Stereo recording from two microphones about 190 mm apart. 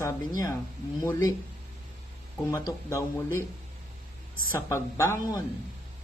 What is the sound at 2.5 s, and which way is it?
Speech, 15° left (ahead or behind).